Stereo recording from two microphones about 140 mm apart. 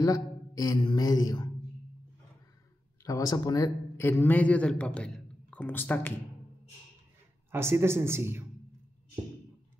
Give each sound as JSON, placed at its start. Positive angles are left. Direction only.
{"t": 0.0, "sound": "speech", "side_deg": 25}
{"t": 3.0, "sound": "speech", "side_deg": 25}
{"t": 7.5, "sound": "speech", "side_deg": -20}